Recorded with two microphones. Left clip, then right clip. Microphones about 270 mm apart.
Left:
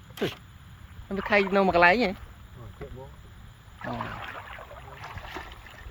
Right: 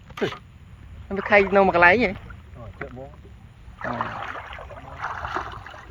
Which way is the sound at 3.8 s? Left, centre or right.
Centre.